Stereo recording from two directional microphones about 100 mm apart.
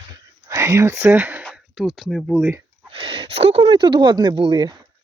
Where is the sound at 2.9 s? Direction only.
55° right (ahead or behind).